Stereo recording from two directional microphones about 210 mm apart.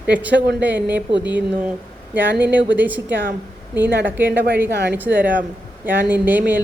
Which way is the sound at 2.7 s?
10° right (ahead or behind).